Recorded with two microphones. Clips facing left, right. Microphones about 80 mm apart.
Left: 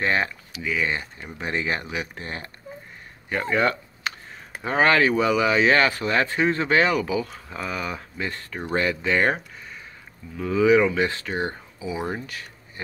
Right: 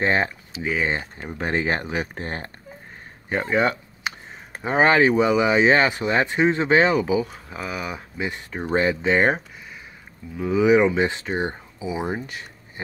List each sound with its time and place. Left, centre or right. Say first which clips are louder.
0.0 s speech: right 2 dB; right
3.3 s speech: right 1 dB; right